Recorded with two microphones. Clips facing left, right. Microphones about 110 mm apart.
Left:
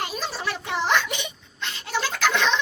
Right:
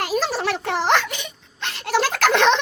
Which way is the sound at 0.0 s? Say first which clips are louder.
Right 7 dB; 80° right.